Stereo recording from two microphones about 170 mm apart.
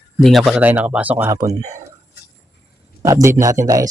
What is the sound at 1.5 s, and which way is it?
Speech, 40° right (ahead or behind).